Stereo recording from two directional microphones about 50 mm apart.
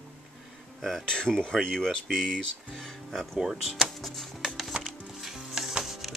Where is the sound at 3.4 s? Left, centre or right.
Centre.